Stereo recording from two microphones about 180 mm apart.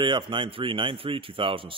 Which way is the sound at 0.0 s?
25° right (ahead or behind).